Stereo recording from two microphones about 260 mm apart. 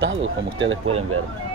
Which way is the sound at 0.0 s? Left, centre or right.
Right.